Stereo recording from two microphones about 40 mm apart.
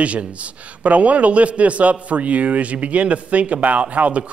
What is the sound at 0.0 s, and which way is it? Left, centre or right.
Speech, right.